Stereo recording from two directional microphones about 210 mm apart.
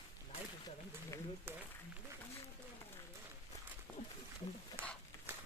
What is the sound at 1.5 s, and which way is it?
Speech, 10° right (ahead or behind).